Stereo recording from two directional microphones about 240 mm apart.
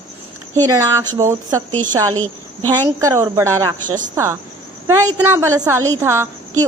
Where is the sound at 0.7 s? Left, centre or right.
Centre.